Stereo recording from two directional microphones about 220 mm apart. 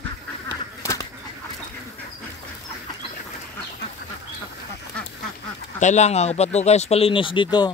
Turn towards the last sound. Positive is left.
turn(degrees=20)  # may be behind; listen again after turning